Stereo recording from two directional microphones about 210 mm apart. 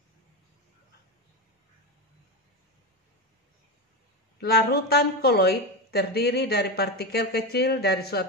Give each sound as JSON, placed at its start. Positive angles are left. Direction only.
{"t": 4.4, "sound": "a woman's voice", "side_deg": 50}